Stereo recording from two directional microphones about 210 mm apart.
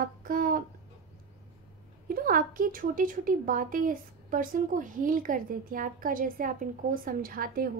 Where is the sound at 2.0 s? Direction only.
40° right (ahead or behind).